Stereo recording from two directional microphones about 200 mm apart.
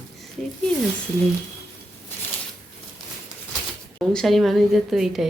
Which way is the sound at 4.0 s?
Centre (ahead or behind).